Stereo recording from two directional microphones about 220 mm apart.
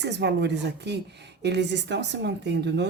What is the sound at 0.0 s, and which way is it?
Speech, 50° right (ahead or behind).